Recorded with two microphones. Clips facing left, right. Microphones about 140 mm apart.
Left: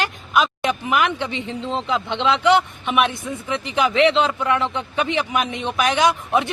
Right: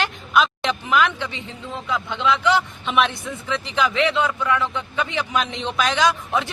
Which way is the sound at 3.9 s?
70° left (ahead or behind).